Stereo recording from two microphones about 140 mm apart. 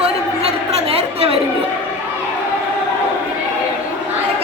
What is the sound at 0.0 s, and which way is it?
Chatter, 45° right (ahead or behind).